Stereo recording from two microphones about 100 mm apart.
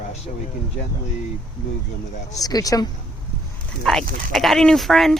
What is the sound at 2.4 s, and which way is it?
Speech, 40° left (ahead or behind).